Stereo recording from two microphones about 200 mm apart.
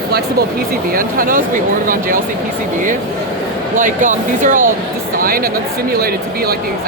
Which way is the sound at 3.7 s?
40° right (ahead or behind).